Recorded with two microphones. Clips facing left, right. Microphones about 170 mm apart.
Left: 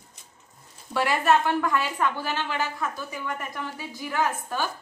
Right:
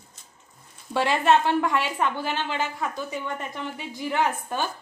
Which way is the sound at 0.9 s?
25° right (ahead or behind).